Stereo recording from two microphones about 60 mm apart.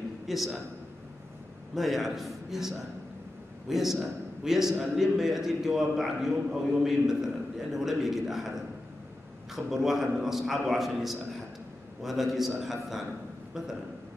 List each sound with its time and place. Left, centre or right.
0.3 s a man's voice: centre
1.8 s a man's voice: centre